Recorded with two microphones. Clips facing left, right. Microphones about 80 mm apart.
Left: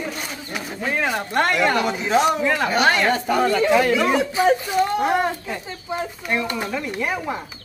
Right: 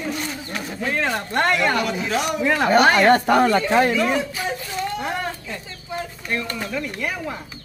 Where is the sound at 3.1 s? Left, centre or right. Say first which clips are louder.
Right 4 dB; right.